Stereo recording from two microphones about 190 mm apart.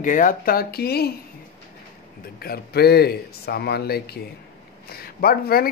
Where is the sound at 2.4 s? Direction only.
55° left (ahead or behind).